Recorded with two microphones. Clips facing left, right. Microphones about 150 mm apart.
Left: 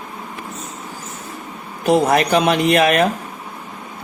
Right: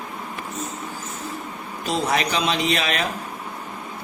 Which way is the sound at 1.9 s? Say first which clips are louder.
Left 9 dB; 55° left (ahead or behind).